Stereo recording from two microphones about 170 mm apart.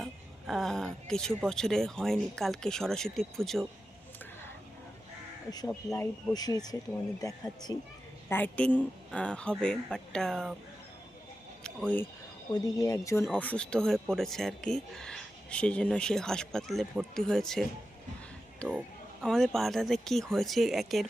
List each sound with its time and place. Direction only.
0.0 s speech: centre (ahead or behind)
5.5 s speech: 20° left (ahead or behind)
8.3 s a woman's voice: 10° left (ahead or behind)
11.6 s a sound: 5° left (ahead or behind)
12.5 s a woman's voice: 20° left (ahead or behind); by 21.1 s centre (ahead or behind)